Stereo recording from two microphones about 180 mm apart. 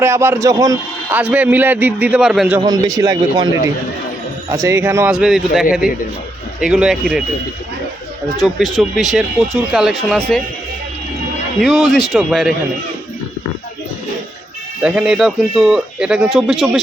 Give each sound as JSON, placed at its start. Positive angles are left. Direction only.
{"t": 0.0, "sound": "a man's voice", "side_deg": -15}
{"t": 2.6, "sound": "speech", "side_deg": -20}
{"t": 4.5, "sound": "a man's voice", "side_deg": -15}
{"t": 5.1, "sound": "speech", "side_deg": 0}
{"t": 8.5, "sound": "speech", "side_deg": 0}
{"t": 11.6, "sound": "speech", "side_deg": 0}
{"t": 14.8, "sound": "speech", "side_deg": -5}